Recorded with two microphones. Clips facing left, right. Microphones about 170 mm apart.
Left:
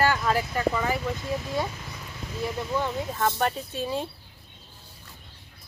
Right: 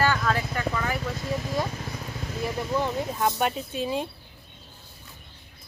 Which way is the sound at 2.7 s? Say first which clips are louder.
Right 2 dB; 15° right (ahead or behind).